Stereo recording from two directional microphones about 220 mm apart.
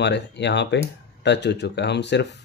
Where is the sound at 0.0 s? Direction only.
50° left (ahead or behind).